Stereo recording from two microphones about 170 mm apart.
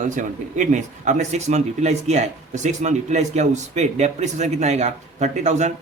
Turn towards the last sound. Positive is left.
turn(degrees=-40)  # may be behind; listen again after turning